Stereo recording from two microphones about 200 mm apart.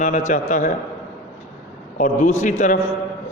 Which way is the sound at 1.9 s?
40° left (ahead or behind).